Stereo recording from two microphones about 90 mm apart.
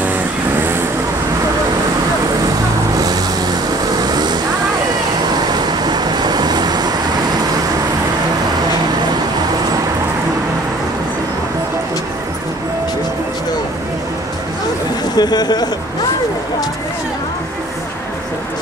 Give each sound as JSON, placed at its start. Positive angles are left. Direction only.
{"t": 0.6, "sound": "vehicle", "side_deg": -25}
{"t": 4.0, "sound": "vehicle", "side_deg": -50}
{"t": 15.1, "sound": "speech", "side_deg": 50}